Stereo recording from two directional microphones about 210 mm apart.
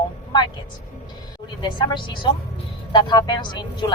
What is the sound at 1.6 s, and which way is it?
A woman's voice, 20° left (ahead or behind).